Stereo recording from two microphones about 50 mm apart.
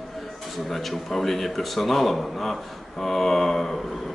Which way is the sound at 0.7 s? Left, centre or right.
Centre.